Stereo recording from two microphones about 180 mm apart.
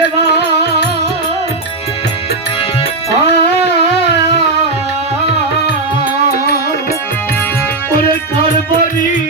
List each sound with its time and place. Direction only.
0.0 s music: 70° left (ahead or behind)
3.2 s a sound: 70° left (ahead or behind)
6.3 s music: 55° left (ahead or behind)